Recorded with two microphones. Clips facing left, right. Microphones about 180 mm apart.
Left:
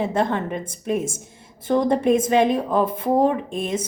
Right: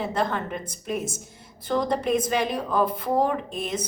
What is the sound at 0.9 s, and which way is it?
Speech, 50° left (ahead or behind).